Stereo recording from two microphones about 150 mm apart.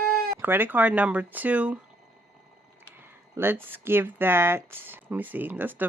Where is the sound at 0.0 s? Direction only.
75° right (ahead or behind).